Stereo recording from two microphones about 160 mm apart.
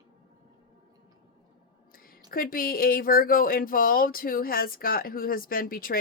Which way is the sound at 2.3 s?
65° left (ahead or behind).